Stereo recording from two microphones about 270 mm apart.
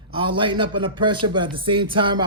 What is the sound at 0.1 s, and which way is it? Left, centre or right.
Speech, centre.